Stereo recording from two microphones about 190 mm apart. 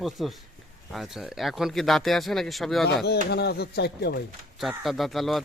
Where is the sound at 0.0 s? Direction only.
Centre (ahead or behind).